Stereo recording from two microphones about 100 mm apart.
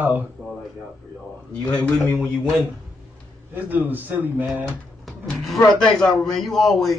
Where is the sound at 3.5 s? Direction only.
15° right (ahead or behind).